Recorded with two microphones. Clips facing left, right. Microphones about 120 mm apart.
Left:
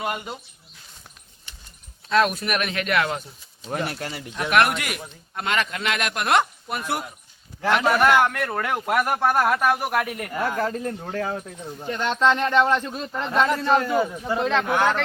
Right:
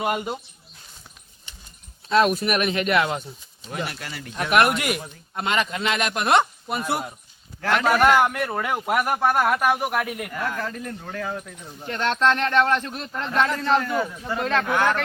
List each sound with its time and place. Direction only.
0.0 s a man's voice: 10° right (ahead or behind)
2.0 s a man's voice: 5° right (ahead or behind)
3.7 s speech: 40° left (ahead or behind)
4.4 s a man's voice: 5° right (ahead or behind)
7.6 s speech: 10° left (ahead or behind)
7.9 s a man's voice: 5° right (ahead or behind)
10.3 s speech: 35° left (ahead or behind)
11.9 s speech: 10° left (ahead or behind)